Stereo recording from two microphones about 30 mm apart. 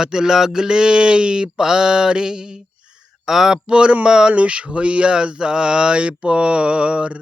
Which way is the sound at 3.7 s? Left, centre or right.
Right.